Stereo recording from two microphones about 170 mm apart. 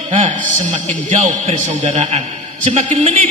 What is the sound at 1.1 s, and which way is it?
A man's voice, 40° right (ahead or behind).